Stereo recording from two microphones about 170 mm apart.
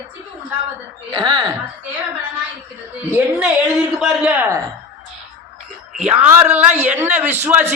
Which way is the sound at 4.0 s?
5° right (ahead or behind).